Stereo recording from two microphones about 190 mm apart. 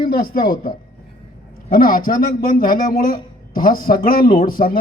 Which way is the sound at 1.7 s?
50° left (ahead or behind).